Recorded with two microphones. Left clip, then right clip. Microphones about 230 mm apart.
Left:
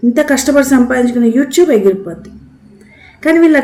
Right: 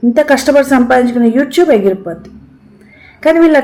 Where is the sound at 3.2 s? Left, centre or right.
Centre.